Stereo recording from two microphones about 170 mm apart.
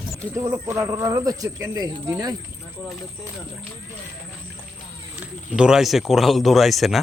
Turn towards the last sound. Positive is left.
turn(degrees=0)  # may be behind; listen again after turning